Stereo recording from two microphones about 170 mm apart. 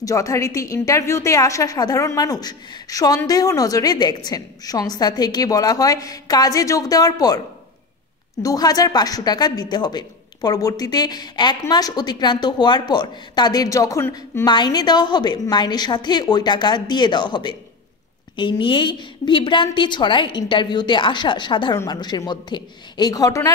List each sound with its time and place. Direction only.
0.0 s a woman's voice: 20° left (ahead or behind)